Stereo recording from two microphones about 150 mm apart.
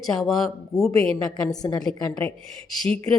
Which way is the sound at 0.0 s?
Centre (ahead or behind).